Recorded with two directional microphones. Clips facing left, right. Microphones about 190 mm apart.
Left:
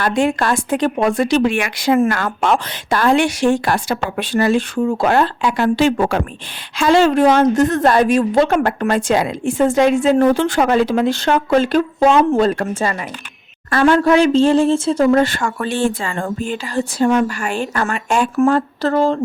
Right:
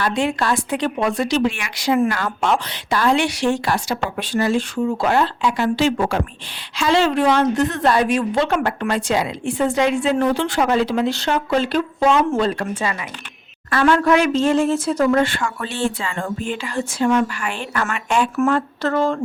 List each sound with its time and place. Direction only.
0.0 s a woman's voice: 50° left (ahead or behind)
13.8 s speech: 30° left (ahead or behind)